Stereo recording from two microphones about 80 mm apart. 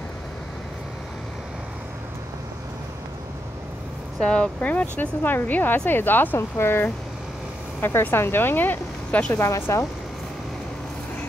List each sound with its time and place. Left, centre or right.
4.2 s speech: centre; by 9.8 s left